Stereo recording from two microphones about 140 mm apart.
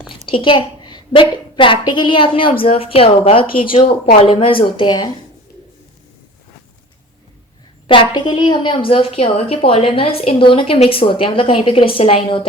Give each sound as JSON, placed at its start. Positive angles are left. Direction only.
{"t": 0.3, "sound": "a woman's voice", "side_deg": 40}
{"t": 7.9, "sound": "a woman's voice", "side_deg": 35}